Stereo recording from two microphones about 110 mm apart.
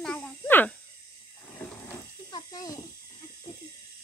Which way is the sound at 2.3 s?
40° left (ahead or behind).